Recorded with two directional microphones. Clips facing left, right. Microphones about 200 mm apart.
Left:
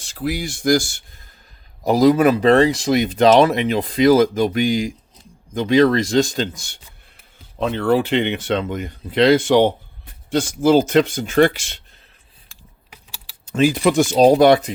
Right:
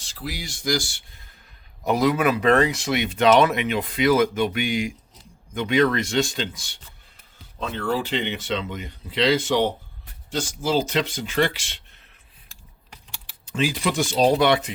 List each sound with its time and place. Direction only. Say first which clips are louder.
0.0 s speech: left 10 dB; 50° left (ahead or behind)
1.8 s speech: left 7 dB; 35° left (ahead or behind)
7.6 s speech: left 8 dB; 60° left (ahead or behind); by 11.8 s 45° left (ahead or behind)
13.4 s speech: left 8 dB; 45° left (ahead or behind)